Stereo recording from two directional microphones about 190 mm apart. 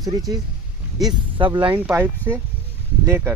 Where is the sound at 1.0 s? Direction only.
25° right (ahead or behind).